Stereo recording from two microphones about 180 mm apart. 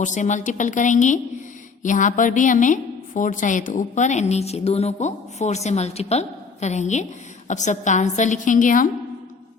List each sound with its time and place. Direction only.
0.0 s a woman's voice: 40° left (ahead or behind)